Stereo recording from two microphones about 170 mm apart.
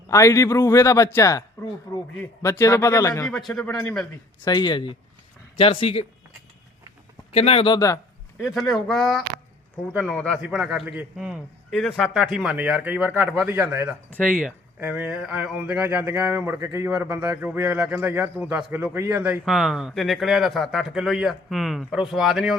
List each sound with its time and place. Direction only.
0.1 s speech: 15° left (ahead or behind)
3.3 s speech: centre (ahead or behind)
4.4 s speech: 25° left (ahead or behind)
7.3 s speech: 35° left (ahead or behind)
8.4 s speech: centre (ahead or behind)